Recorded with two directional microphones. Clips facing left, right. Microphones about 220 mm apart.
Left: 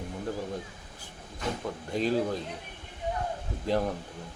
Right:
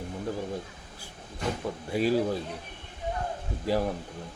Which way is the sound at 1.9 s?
5° right (ahead or behind).